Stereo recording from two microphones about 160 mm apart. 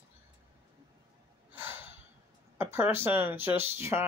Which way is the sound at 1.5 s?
15° right (ahead or behind).